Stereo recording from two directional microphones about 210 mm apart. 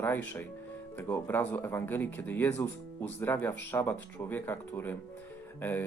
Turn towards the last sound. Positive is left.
turn(degrees=10)  # may be behind; listen again after turning